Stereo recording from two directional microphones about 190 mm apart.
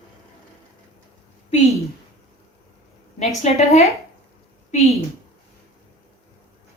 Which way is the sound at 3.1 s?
35° left (ahead or behind).